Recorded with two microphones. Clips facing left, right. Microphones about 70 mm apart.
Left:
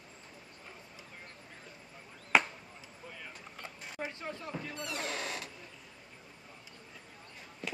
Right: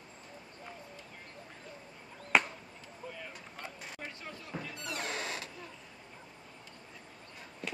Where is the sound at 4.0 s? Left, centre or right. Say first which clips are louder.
Left 7 dB; left.